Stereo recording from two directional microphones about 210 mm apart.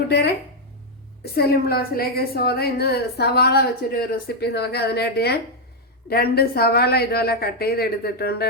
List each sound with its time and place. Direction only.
1.2 s a woman's voice: 50° left (ahead or behind)